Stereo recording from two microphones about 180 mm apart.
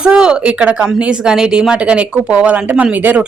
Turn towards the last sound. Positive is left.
turn(degrees=-10)  # may be behind; listen again after turning